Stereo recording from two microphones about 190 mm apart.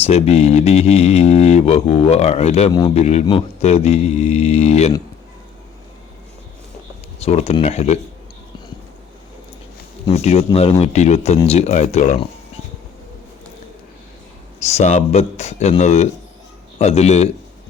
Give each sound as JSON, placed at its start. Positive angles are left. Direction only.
{"t": 0.0, "sound": "speech", "side_deg": 30}
{"t": 7.2, "sound": "speech", "side_deg": 35}
{"t": 10.1, "sound": "speech", "side_deg": 35}
{"t": 14.6, "sound": "speech", "side_deg": 35}